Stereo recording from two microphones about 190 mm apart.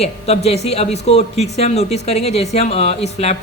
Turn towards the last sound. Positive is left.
turn(degrees=35)  # may be behind; listen again after turning